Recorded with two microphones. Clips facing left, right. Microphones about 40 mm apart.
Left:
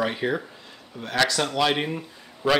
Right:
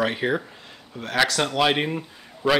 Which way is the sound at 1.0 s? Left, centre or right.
Right.